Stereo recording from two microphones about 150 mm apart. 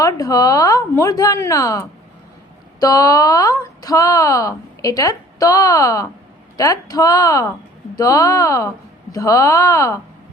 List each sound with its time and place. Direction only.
0.0 s speech: 25° left (ahead or behind)